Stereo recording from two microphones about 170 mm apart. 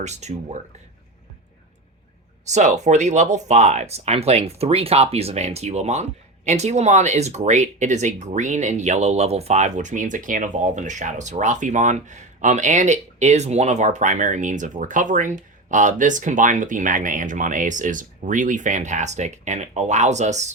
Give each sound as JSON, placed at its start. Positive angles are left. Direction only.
{"t": 0.0, "sound": "speech", "side_deg": -40}
{"t": 2.4, "sound": "speech", "side_deg": -45}